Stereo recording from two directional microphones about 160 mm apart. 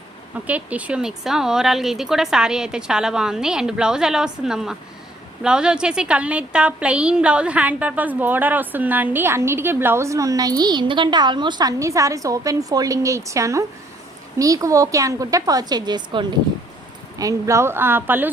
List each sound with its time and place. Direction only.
0.4 s a woman's voice: 10° right (ahead or behind)